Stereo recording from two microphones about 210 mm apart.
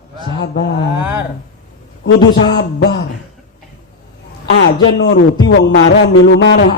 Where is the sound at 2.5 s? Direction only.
50° left (ahead or behind).